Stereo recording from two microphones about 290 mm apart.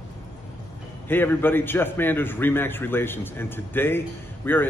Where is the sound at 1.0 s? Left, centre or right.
Centre.